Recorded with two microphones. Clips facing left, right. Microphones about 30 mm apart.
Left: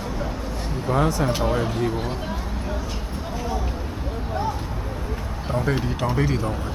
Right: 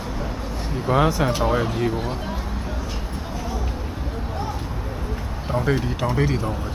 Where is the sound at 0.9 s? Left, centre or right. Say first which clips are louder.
Right 2 dB; centre.